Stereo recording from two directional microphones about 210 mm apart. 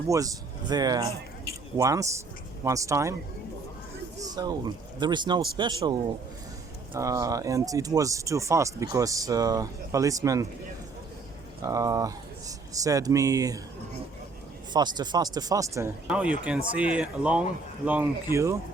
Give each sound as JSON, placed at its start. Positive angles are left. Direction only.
{"t": 0.1, "sound": "speech", "side_deg": -15}
{"t": 4.3, "sound": "speech", "side_deg": -20}
{"t": 11.6, "sound": "speech", "side_deg": -15}
{"t": 14.7, "sound": "speech", "side_deg": -20}